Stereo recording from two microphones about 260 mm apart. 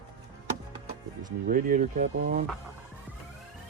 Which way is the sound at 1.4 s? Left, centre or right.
Right.